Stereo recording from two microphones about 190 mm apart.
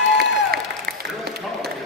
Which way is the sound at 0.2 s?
55° right (ahead or behind).